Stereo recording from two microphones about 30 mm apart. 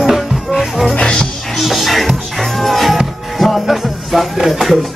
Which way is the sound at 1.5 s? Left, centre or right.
Centre.